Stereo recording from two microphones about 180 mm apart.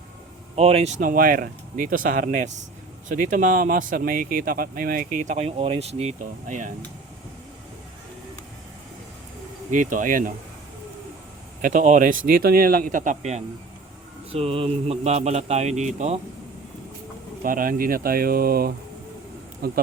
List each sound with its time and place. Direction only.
0.5 s speech: 35° right (ahead or behind)
9.6 s speech: 45° right (ahead or behind)
11.6 s speech: 45° right (ahead or behind)
12.2 s speech: 55° right (ahead or behind)
14.3 s speech: 30° right (ahead or behind)
17.4 s speech: 50° right (ahead or behind)